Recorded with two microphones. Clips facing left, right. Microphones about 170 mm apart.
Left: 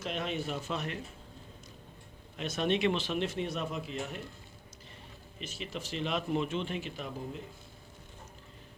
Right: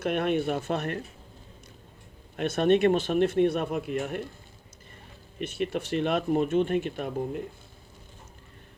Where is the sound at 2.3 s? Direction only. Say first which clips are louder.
Right 8 dB; 55° right (ahead or behind).